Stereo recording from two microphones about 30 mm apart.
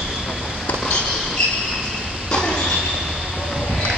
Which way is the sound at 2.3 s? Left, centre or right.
Left.